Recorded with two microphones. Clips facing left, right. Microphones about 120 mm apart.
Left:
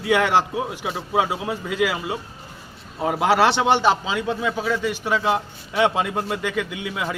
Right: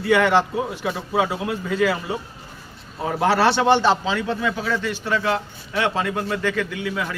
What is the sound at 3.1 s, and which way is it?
A man's voice, 15° left (ahead or behind).